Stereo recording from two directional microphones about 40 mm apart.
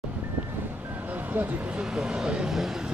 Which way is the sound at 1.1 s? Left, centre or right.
Right.